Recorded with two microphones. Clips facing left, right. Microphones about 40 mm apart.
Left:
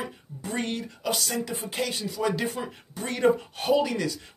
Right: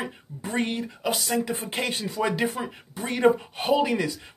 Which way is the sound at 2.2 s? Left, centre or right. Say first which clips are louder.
Right 1 dB; right.